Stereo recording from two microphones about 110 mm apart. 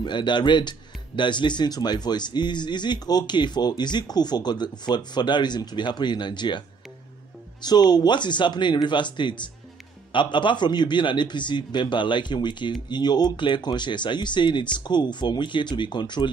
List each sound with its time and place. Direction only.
0.0 s speech: 45° left (ahead or behind)
7.6 s speech: 40° left (ahead or behind)